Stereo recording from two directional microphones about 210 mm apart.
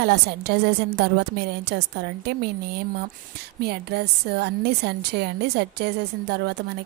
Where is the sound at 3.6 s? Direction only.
50° right (ahead or behind).